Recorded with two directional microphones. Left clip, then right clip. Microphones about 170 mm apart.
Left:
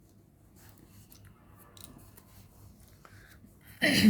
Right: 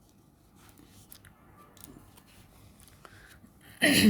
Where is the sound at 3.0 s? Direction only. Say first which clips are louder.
Right 3 dB; 30° right (ahead or behind).